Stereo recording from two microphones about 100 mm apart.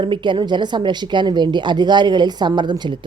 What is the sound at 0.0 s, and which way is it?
Speech, 50° right (ahead or behind).